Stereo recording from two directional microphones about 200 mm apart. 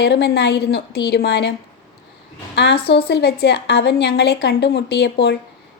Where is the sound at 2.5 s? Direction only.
60° left (ahead or behind).